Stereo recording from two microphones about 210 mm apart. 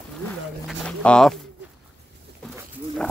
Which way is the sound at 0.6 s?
5° left (ahead or behind).